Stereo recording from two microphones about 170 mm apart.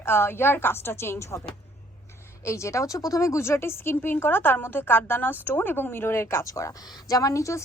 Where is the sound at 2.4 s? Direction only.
15° left (ahead or behind).